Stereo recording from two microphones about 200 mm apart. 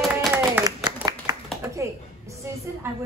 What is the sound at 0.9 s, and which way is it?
Clapping, 20° right (ahead or behind).